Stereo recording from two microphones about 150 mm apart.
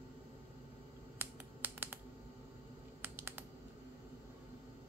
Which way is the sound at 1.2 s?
15° right (ahead or behind).